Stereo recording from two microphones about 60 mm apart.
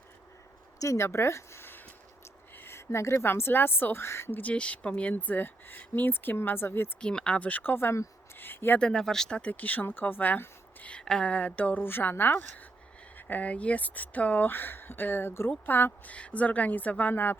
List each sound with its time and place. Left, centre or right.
0.8 s speech: left
2.6 s a sound: left
3.2 s speech: left
4.4 s speech: left
5.1 s speech: left
7.0 s speech: centre; by 8.8 s left
8.8 s speech: centre
9.4 s speech: left
11.0 s speech: centre
11.3 s speech: left
16.1 s speech: left